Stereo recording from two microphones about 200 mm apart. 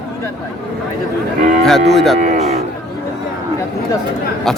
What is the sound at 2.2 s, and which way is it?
Cattle, 35° right (ahead or behind).